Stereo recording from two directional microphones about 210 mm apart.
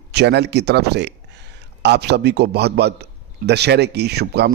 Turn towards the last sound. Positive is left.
turn(degrees=-50)  # may be behind; listen again after turning